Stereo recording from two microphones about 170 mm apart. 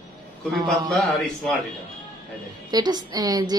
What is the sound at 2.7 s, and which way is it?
Speech, 25° right (ahead or behind).